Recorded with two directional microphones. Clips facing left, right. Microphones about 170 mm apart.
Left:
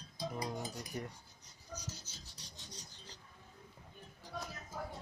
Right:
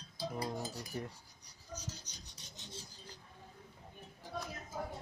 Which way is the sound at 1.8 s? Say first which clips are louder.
Right 1 dB; 10° left (ahead or behind).